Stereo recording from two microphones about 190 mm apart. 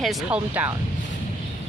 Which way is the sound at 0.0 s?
5° right (ahead or behind).